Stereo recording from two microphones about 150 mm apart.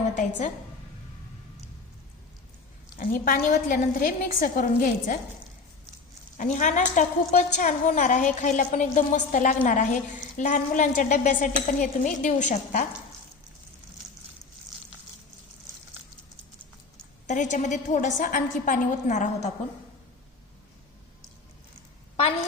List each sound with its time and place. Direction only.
0.1 s a woman's voice: 55° left (ahead or behind)
3.0 s a woman's voice: 70° left (ahead or behind)
6.3 s a woman's voice: 55° left (ahead or behind)
17.2 s a woman's voice: 55° left (ahead or behind)